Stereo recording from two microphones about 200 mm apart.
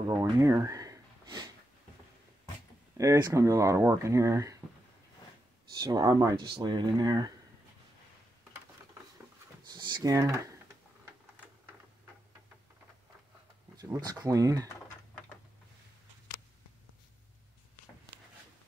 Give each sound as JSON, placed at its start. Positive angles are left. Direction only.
{"t": 0.1, "sound": "speech", "side_deg": -15}
{"t": 3.0, "sound": "speech", "side_deg": -20}
{"t": 5.8, "sound": "speech", "side_deg": -20}
{"t": 9.7, "sound": "speech", "side_deg": -20}
{"t": 13.7, "sound": "speech", "side_deg": -20}